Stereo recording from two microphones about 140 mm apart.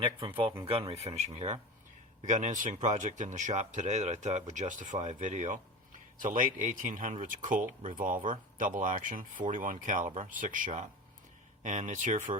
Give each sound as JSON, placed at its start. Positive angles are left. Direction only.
{"t": 0.0, "sound": "speech", "side_deg": -40}
{"t": 2.2, "sound": "speech", "side_deg": -60}
{"t": 6.1, "sound": "speech", "side_deg": -75}